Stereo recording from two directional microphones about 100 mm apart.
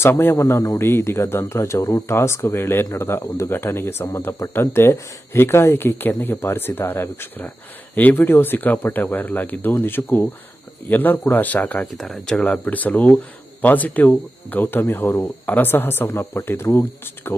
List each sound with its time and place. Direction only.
0.0 s speech: 25° left (ahead or behind)
11.9 s speech: 5° left (ahead or behind); by 16.8 s 25° left (ahead or behind)